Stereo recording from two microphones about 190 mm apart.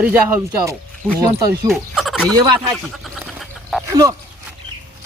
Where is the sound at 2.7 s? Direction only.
Centre (ahead or behind).